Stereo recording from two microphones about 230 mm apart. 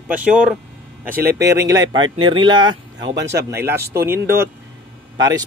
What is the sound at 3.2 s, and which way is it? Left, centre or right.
Speech, right.